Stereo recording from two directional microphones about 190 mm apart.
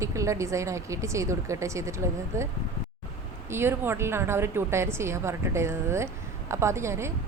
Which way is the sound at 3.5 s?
10° right (ahead or behind).